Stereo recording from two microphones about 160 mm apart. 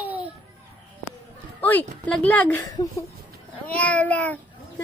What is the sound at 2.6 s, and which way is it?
Speech, 25° left (ahead or behind).